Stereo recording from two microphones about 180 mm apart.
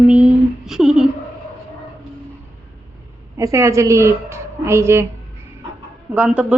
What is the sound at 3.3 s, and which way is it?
A woman's voice, 15° right (ahead or behind).